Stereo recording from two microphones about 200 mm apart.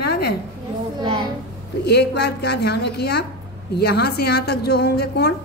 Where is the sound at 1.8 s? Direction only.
55° left (ahead or behind).